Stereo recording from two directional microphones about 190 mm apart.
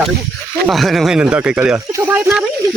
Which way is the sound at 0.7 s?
Centre (ahead or behind).